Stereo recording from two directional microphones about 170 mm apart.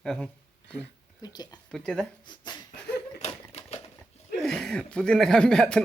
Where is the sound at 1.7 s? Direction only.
5° left (ahead or behind).